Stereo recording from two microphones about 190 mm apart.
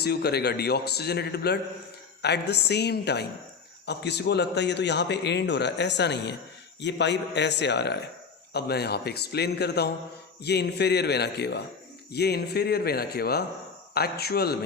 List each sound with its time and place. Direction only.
0.0 s a man's voice: 60° left (ahead or behind)